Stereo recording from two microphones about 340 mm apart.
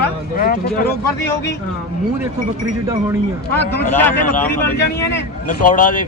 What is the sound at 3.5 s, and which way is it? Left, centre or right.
Speech, centre.